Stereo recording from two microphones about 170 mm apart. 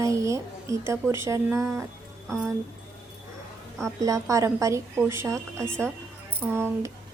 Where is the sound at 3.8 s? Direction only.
20° right (ahead or behind).